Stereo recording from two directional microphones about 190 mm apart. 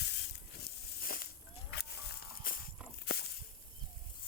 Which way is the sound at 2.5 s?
50° left (ahead or behind).